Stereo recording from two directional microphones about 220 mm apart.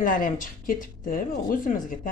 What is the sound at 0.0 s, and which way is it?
Speech, 35° left (ahead or behind).